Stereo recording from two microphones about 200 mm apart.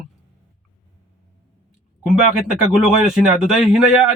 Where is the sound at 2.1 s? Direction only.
5° right (ahead or behind).